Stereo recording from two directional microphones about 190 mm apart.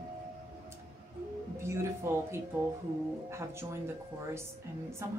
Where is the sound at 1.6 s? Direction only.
15° right (ahead or behind).